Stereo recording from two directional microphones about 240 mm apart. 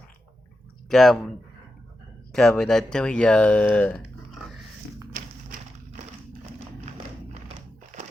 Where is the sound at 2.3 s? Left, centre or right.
Centre.